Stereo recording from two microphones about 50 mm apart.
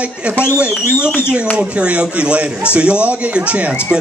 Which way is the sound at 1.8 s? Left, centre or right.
Right.